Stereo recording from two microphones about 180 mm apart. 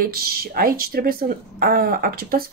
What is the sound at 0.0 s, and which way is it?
A woman's voice, 55° right (ahead or behind).